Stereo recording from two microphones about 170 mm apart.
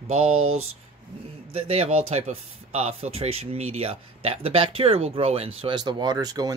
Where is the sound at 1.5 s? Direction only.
35° right (ahead or behind).